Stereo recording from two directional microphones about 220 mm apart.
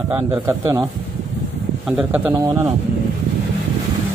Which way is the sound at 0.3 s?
15° right (ahead or behind).